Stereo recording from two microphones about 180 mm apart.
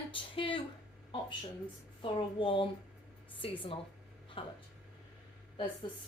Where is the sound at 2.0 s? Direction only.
25° left (ahead or behind).